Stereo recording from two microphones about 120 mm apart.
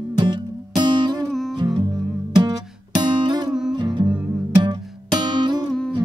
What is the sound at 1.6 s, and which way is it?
Music, 35° right (ahead or behind).